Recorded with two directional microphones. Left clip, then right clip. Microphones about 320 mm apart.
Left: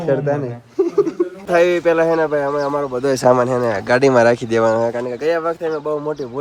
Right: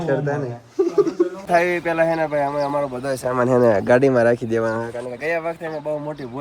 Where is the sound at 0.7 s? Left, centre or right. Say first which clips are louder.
Left 2 dB; centre.